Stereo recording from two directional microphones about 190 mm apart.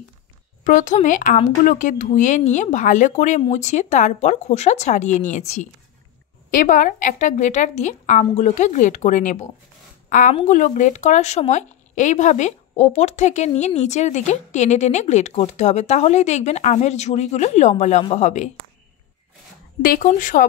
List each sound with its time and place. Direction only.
0.7 s a woman's voice: 40° left (ahead or behind)
19.8 s speech: 45° left (ahead or behind)